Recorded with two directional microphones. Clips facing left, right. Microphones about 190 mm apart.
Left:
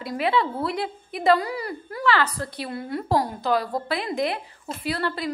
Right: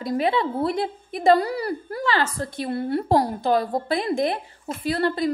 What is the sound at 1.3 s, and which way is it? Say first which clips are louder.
Speech: right 3 dB; 35° right (ahead or behind).